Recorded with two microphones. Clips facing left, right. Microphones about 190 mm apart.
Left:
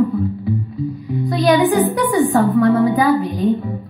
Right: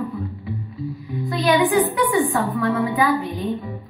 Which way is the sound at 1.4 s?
40° left (ahead or behind).